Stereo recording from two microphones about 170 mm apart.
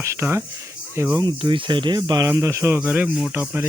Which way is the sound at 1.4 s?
30° right (ahead or behind).